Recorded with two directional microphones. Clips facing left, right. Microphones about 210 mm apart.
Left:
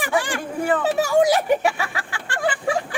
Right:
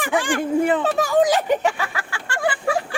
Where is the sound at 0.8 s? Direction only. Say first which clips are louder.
Even; 10° left (ahead or behind).